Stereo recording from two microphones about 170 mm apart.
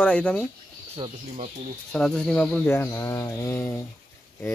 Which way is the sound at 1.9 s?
5° left (ahead or behind).